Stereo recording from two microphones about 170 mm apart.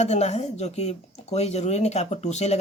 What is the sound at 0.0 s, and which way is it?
Speech, 40° left (ahead or behind).